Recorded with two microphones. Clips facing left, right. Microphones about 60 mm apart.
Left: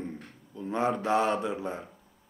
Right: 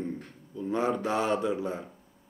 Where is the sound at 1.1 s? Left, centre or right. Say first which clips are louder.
Left 1 dB; centre.